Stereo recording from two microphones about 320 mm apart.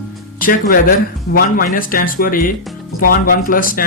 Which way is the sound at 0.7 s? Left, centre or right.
Left.